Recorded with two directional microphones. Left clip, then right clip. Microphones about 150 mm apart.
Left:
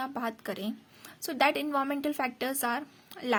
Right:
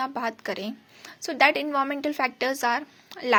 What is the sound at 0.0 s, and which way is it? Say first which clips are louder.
A woman's voice: right 6 dB; 25° left (ahead or behind).